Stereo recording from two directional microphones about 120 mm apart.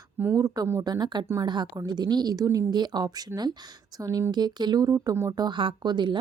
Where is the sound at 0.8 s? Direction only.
35° right (ahead or behind).